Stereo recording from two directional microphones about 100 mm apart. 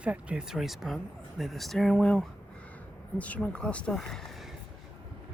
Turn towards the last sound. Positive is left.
turn(degrees=0)  # may be behind; listen again after turning